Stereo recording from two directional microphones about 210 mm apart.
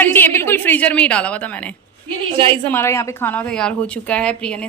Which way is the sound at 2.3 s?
25° right (ahead or behind).